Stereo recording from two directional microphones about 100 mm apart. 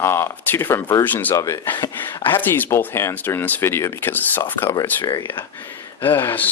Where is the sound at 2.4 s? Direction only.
20° left (ahead or behind).